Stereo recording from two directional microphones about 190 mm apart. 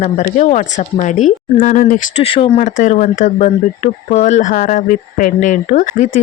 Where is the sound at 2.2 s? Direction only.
30° left (ahead or behind).